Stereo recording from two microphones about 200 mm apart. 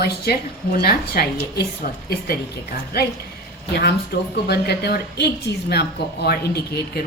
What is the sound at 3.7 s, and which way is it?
A woman's voice, 55° left (ahead or behind).